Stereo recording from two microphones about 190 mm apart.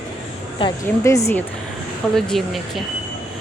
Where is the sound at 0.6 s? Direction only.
15° left (ahead or behind).